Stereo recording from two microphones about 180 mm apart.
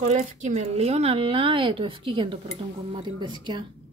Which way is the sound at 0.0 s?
40° right (ahead or behind).